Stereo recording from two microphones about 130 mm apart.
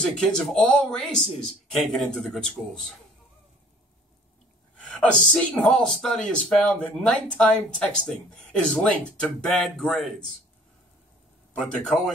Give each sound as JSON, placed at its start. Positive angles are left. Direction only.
{"t": 0.0, "sound": "speech", "side_deg": 5}
{"t": 4.8, "sound": "speech", "side_deg": 5}
{"t": 11.5, "sound": "speech", "side_deg": 5}